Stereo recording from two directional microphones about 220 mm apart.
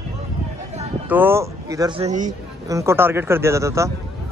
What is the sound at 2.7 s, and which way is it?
Speech, 15° right (ahead or behind).